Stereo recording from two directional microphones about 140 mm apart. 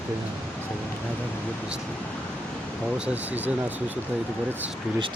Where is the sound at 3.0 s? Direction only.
10° right (ahead or behind).